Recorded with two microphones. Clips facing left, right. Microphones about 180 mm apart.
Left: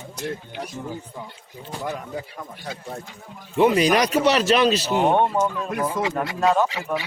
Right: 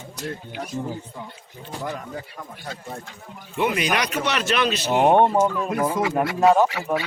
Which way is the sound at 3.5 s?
35° left (ahead or behind).